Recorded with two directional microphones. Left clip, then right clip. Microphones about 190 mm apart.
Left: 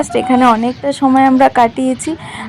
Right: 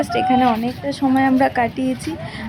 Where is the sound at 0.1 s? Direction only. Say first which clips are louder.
Left 6 dB; 15° left (ahead or behind).